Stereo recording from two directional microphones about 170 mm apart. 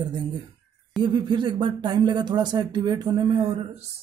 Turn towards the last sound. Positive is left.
turn(degrees=-35)  # may be behind; listen again after turning